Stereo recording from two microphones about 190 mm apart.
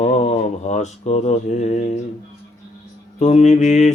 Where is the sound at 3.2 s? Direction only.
35° left (ahead or behind).